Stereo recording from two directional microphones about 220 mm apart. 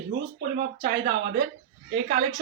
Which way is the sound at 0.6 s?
45° right (ahead or behind).